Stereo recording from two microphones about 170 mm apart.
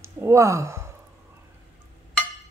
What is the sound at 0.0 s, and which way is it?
Speech, 15° right (ahead or behind).